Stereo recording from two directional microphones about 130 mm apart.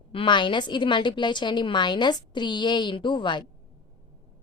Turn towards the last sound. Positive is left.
turn(degrees=35)  # may be behind; listen again after turning